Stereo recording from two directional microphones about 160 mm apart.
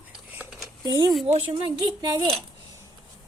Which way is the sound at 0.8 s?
25° right (ahead or behind).